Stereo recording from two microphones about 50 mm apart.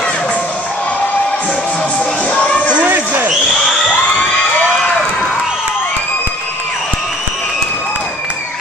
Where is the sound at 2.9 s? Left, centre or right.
Right.